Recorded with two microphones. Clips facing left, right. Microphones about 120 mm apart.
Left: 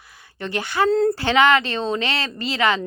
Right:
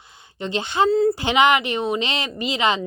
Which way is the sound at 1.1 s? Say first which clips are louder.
Left 1 dB; 15° right (ahead or behind).